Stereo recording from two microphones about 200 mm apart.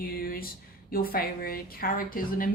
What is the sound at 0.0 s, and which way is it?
A woman's voice, 45° left (ahead or behind).